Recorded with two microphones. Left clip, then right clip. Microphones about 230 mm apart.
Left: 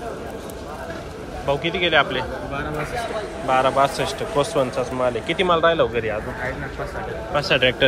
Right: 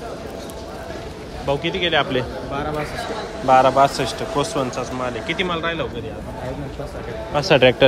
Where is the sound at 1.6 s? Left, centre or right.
Right.